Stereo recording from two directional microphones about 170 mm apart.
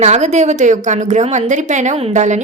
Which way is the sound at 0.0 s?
40° right (ahead or behind).